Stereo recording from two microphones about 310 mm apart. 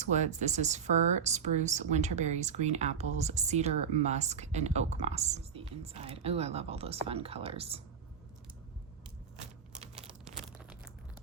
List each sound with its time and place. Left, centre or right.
0.0 s speech: right
9.7 s a sound: centre
10.2 s crumpling: centre